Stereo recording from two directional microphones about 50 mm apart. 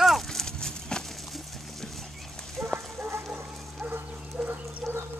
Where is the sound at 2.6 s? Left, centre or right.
Right.